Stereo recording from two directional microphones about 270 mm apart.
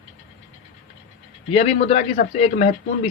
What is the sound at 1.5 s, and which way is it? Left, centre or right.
Speech, left.